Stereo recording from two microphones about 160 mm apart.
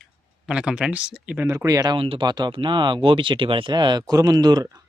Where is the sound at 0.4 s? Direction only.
5° right (ahead or behind).